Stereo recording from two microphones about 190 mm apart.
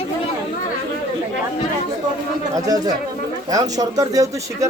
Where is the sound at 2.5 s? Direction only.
20° right (ahead or behind).